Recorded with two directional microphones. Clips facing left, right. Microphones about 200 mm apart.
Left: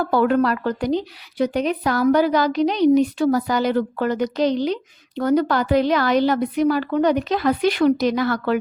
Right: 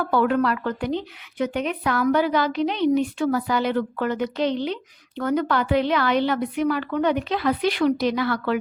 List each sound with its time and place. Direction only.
0.0 s a woman's voice: 40° left (ahead or behind)